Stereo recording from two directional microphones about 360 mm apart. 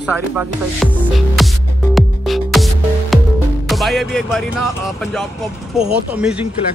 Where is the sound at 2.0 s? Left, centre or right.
Centre.